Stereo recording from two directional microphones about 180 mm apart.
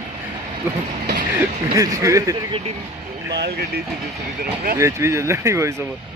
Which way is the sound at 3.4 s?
60° right (ahead or behind).